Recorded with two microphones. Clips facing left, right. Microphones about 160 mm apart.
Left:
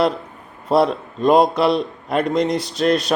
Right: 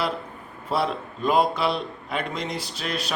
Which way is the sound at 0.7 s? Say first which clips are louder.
Left 9 dB; 35° left (ahead or behind).